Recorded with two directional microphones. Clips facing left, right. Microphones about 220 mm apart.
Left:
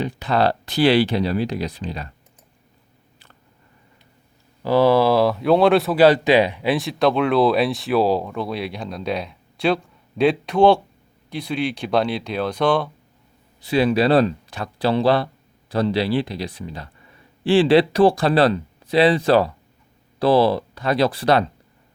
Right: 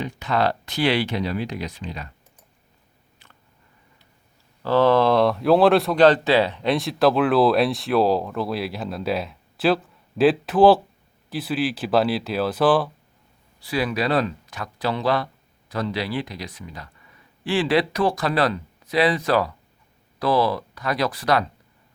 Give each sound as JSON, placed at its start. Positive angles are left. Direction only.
{"t": 0.0, "sound": "speech", "side_deg": 35}
{"t": 4.6, "sound": "speech", "side_deg": 10}
{"t": 13.6, "sound": "speech", "side_deg": 25}